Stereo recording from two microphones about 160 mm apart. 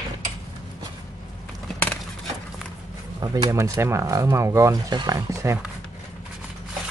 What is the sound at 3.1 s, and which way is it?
Speech, 25° right (ahead or behind).